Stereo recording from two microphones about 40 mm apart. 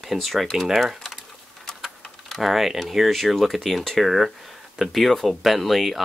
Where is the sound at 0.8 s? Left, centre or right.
Centre.